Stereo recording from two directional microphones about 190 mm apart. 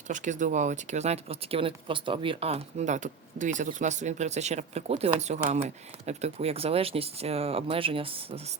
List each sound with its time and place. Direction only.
0.1 s speech: 40° right (ahead or behind)